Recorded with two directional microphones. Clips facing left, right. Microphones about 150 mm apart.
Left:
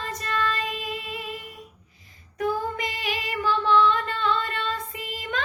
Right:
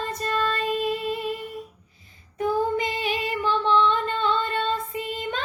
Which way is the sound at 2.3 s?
30° right (ahead or behind).